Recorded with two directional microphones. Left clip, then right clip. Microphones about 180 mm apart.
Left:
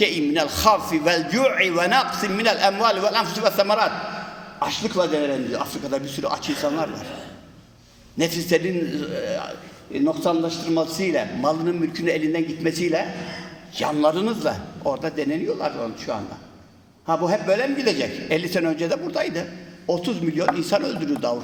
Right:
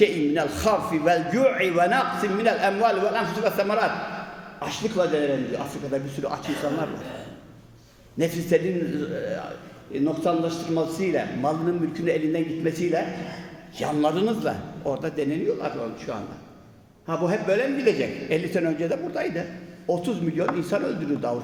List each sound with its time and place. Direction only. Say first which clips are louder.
0.0 s a man's voice: left 1 dB; 15° right (ahead or behind)
8.2 s a man's voice: left 2 dB; 15° right (ahead or behind)